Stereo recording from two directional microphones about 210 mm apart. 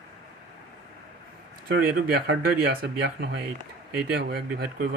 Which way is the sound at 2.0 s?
45° right (ahead or behind).